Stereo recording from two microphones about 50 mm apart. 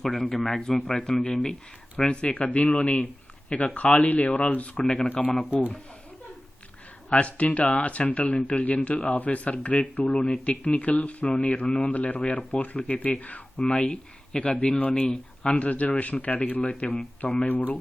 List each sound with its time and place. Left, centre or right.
0.0 s speech: centre
0.9 s speech: centre
2.0 s speech: left
5.2 s speech: centre
7.1 s speech: left
15.5 s speech: left